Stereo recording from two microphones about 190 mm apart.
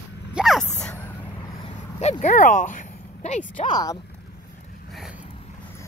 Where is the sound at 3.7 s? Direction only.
20° left (ahead or behind).